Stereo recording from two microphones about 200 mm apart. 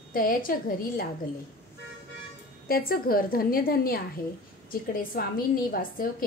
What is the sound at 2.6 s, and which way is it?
A woman's voice, 45° left (ahead or behind).